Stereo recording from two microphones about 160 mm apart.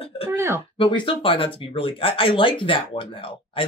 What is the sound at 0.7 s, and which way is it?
Speech, 30° left (ahead or behind).